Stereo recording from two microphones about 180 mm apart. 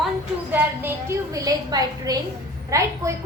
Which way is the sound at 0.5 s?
15° right (ahead or behind).